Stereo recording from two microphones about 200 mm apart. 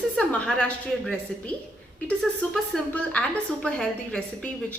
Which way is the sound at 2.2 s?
5° left (ahead or behind).